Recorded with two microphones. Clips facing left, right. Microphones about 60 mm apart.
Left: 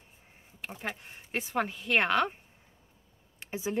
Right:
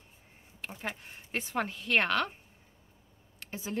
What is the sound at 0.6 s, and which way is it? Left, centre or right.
Speech, centre.